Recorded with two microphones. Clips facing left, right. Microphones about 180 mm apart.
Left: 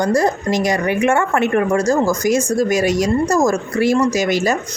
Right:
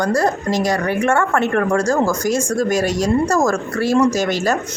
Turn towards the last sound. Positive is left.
turn(degrees=10)  # may be behind; listen again after turning